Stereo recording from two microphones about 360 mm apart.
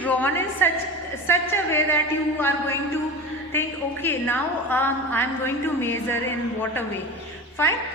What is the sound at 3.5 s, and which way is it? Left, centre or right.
A woman's voice, centre.